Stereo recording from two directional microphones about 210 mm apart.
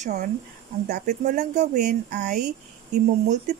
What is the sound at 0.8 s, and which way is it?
Speech, 50° right (ahead or behind).